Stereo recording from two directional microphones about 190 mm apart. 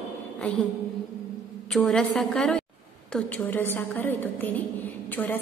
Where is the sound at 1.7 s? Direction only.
Centre (ahead or behind).